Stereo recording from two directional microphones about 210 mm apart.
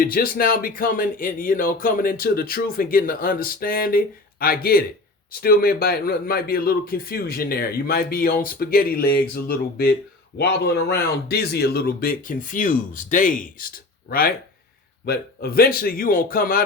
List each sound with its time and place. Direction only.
0.0 s speech: 45° left (ahead or behind)